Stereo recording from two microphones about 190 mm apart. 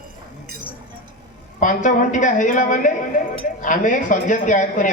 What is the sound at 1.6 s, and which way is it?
A man's voice, 45° left (ahead or behind).